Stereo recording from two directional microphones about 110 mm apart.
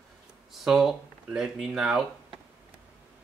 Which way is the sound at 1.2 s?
5° right (ahead or behind).